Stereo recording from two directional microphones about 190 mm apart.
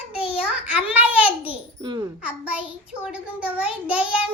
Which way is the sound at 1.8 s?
25° right (ahead or behind).